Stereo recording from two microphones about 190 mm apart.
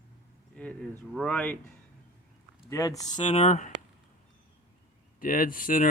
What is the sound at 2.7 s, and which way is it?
Speech, 20° left (ahead or behind).